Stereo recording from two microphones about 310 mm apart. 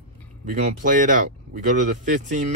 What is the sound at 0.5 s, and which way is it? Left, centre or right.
Speech, right.